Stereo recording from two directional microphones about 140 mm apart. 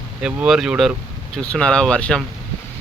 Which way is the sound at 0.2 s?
10° right (ahead or behind).